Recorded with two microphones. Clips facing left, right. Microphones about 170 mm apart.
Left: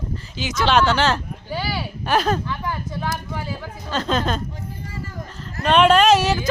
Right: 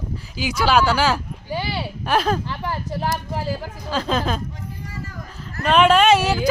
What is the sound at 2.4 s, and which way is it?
Speech, 30° right (ahead or behind).